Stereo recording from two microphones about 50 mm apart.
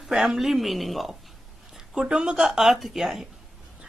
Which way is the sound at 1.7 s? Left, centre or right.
Centre.